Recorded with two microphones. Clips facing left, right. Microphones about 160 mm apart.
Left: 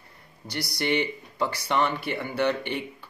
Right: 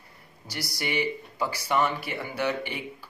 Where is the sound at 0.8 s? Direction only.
10° right (ahead or behind).